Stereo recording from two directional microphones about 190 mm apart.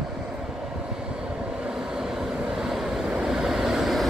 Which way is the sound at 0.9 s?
5° right (ahead or behind).